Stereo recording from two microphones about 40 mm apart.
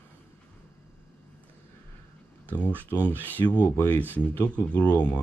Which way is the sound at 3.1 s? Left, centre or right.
Left.